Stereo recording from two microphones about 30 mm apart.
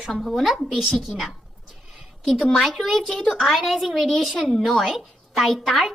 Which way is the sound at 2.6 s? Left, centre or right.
Centre.